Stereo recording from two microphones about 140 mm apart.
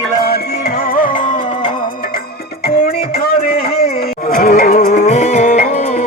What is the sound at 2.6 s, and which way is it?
Music, 90° left.